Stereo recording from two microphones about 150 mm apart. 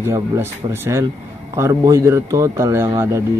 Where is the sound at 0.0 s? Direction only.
15° right (ahead or behind).